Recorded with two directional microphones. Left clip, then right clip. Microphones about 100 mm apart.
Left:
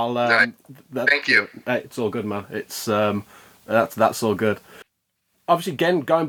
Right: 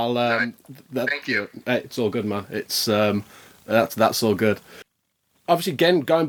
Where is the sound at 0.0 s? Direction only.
25° right (ahead or behind).